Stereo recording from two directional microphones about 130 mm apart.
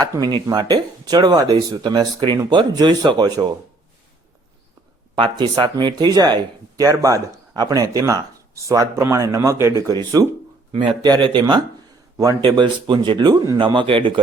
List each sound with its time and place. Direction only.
0.0 s speech: 30° right (ahead or behind)
5.1 s speech: 40° right (ahead or behind)
10.7 s speech: 40° right (ahead or behind)
13.6 s speech: 40° right (ahead or behind)